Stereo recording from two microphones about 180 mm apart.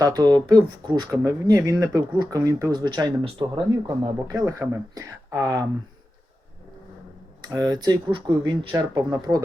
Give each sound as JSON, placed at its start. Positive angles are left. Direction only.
{"t": 0.0, "sound": "speech", "side_deg": -20}
{"t": 7.5, "sound": "speech", "side_deg": -20}